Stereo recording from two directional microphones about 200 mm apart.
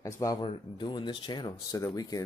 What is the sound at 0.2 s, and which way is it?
Speech, 20° left (ahead or behind).